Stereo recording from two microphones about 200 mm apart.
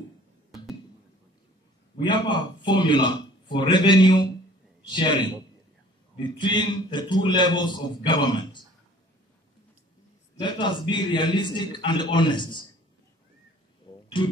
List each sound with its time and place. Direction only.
2.0 s a man's voice: 25° left (ahead or behind)
10.3 s a man's voice: 25° left (ahead or behind)
14.0 s a sound: 25° left (ahead or behind)